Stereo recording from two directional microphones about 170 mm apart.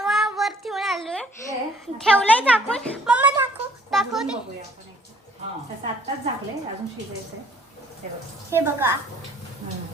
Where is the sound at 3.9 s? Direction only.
Centre (ahead or behind).